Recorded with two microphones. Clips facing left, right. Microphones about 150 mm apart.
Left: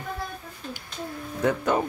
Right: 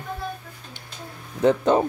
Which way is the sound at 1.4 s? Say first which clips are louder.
Right 5 dB; 25° right (ahead or behind).